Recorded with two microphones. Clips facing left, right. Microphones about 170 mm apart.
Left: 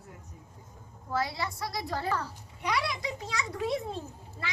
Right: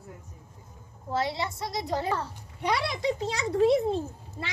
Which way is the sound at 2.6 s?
30° right (ahead or behind).